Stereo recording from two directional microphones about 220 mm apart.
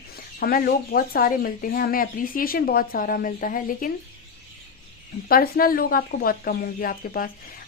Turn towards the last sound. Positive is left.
turn(degrees=40)  # may be behind; listen again after turning